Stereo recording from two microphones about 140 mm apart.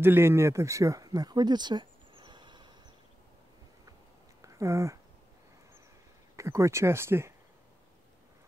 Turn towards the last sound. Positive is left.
turn(degrees=-15)  # may be behind; listen again after turning